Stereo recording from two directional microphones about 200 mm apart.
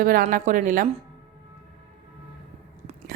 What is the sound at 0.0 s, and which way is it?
Speech, 45° right (ahead or behind).